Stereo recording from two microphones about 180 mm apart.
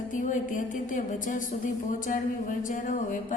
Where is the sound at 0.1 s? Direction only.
45° left (ahead or behind).